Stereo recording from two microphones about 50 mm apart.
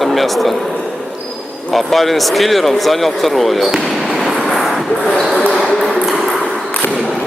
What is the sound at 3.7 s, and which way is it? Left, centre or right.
Basketball bounce, centre.